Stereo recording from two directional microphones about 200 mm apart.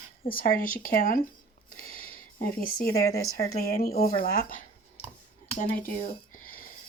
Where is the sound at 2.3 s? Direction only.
45° left (ahead or behind).